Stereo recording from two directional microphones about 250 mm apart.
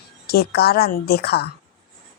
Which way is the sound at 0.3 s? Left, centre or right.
Left.